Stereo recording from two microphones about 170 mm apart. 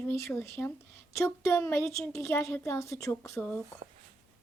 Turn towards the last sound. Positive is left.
turn(degrees=15)  # may be behind; listen again after turning